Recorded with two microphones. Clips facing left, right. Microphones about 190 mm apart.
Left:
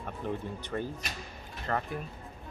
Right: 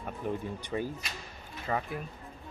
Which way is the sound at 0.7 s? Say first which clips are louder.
Right 1 dB; 5° right (ahead or behind).